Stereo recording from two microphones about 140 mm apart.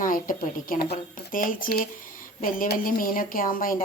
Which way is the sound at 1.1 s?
75° left (ahead or behind).